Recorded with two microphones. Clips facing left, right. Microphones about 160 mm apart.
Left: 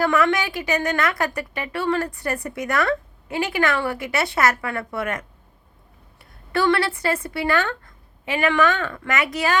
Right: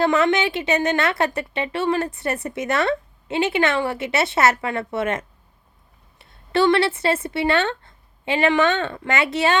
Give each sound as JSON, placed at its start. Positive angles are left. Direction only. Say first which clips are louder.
{"t": 0.0, "sound": "a woman's voice", "louder": "right 2 dB", "side_deg": -25}